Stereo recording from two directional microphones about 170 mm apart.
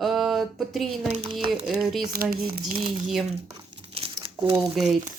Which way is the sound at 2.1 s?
60° right (ahead or behind).